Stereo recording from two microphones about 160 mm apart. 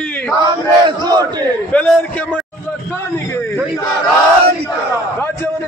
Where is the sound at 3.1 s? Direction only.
15° left (ahead or behind).